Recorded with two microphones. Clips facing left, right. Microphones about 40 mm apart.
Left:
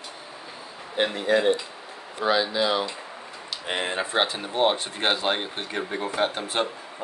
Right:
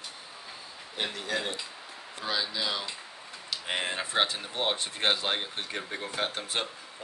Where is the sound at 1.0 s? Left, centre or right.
Left.